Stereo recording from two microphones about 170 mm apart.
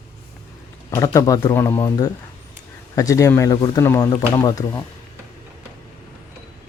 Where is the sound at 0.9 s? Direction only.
20° left (ahead or behind).